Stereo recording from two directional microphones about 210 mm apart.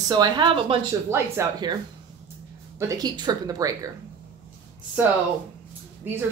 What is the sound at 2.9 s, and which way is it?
Speech, 20° right (ahead or behind).